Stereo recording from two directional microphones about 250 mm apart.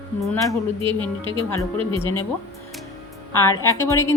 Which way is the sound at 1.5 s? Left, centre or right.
Centre.